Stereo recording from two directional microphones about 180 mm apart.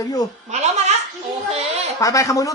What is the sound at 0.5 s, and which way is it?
Speech, 40° right (ahead or behind).